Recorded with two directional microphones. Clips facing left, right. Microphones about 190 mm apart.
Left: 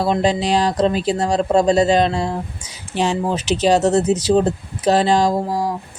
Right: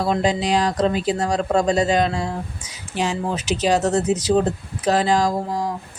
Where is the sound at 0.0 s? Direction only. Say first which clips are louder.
Left 2 dB; 30° left (ahead or behind).